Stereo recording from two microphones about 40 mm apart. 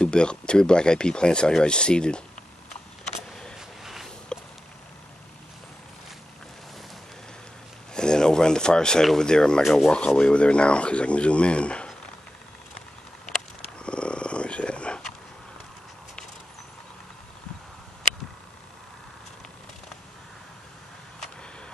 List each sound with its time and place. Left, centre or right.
0.0 s speech: left
3.3 s vehicle: centre
3.5 s a sound: centre
4.3 s arrow: centre
7.9 s a sound: centre
9.2 s speech: centre
9.6 s speech: centre
9.8 s speech: left
13.7 s a sound: left